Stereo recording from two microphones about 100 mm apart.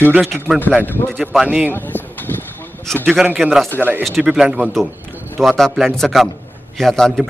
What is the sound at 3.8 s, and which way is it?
Speech, 20° right (ahead or behind).